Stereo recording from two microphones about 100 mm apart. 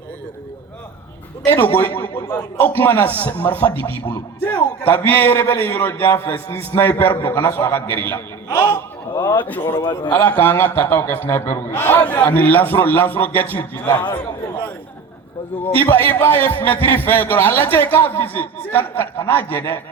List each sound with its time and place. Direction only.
1.5 s a man's voice: 20° left (ahead or behind)
9.8 s a man's voice: 45° left (ahead or behind)
10.1 s a man's voice: 20° left (ahead or behind)
13.9 s a man's voice: 50° left (ahead or behind)
15.7 s a man's voice: 20° left (ahead or behind)